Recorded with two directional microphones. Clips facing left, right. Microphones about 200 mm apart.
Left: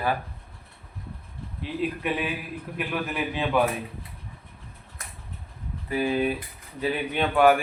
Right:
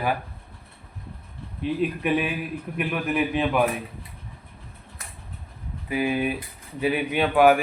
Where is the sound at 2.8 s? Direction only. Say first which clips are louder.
Right 4 dB; 15° right (ahead or behind).